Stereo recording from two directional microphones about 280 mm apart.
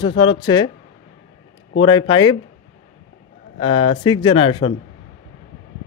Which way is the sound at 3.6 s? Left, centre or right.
Centre.